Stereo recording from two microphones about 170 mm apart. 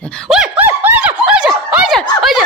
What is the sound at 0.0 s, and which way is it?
Snicker, 5° left (ahead or behind).